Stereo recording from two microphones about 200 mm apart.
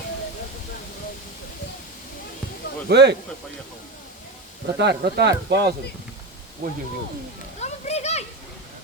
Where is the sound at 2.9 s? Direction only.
55° right (ahead or behind).